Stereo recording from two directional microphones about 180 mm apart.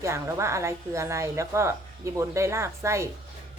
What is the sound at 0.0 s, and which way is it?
A woman's voice, 15° right (ahead or behind).